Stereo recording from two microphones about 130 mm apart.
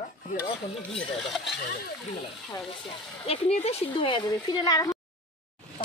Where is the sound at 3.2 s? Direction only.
50° left (ahead or behind); by 5.0 s 30° left (ahead or behind).